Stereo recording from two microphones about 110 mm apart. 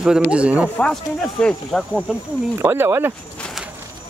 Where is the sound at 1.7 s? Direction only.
10° left (ahead or behind).